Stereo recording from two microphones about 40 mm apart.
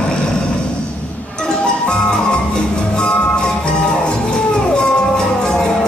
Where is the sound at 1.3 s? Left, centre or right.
Left.